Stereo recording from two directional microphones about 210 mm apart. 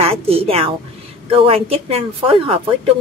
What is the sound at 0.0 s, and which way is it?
A woman's voice, 25° right (ahead or behind).